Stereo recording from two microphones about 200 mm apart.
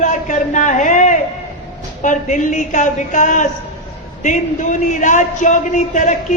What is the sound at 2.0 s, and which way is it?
A man's voice, 40° left (ahead or behind).